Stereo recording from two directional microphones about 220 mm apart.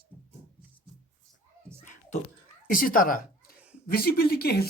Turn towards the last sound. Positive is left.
turn(degrees=45)  # may be behind; listen again after turning